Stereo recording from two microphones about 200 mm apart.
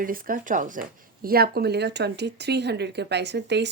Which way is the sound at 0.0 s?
45° right (ahead or behind).